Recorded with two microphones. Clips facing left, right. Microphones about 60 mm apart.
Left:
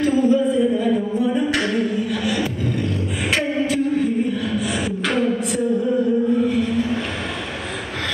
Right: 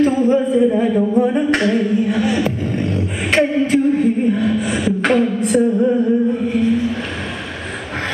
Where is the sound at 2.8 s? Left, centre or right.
Right.